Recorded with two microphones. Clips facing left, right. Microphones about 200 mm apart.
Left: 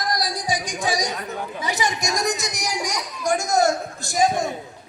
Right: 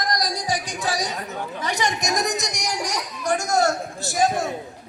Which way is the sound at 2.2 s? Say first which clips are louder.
Left 1 dB; centre (ahead or behind).